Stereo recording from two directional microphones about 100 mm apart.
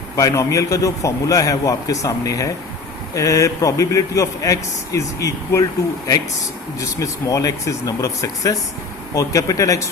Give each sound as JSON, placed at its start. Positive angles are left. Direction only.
{"t": 0.2, "sound": "a man's voice", "side_deg": 30}
{"t": 6.7, "sound": "a man's voice", "side_deg": 35}